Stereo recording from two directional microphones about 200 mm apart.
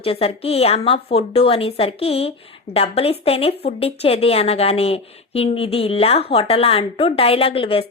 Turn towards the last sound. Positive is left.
turn(degrees=30)  # may be behind; listen again after turning